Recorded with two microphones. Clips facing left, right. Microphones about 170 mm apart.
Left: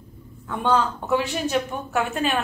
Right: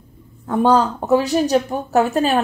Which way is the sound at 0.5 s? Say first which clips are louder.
Right 7 dB; 40° right (ahead or behind).